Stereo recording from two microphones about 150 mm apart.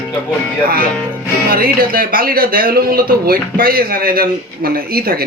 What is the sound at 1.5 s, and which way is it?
Speech, 75° right (ahead or behind).